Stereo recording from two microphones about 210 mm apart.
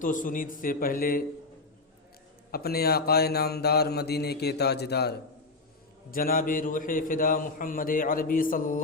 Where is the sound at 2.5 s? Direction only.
50° left (ahead or behind).